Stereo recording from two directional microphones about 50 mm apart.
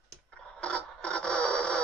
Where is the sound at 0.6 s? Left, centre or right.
Centre.